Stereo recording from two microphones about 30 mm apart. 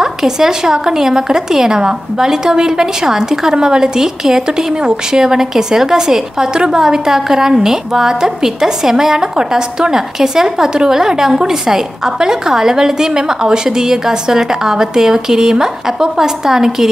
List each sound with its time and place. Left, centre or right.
0.0 s a woman's voice: centre